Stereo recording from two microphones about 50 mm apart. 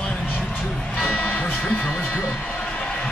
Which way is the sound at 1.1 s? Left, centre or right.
Left.